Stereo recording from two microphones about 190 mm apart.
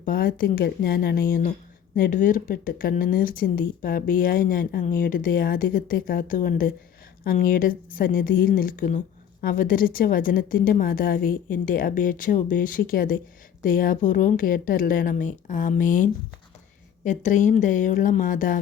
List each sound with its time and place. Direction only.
0.0 s a woman's voice: 50° left (ahead or behind)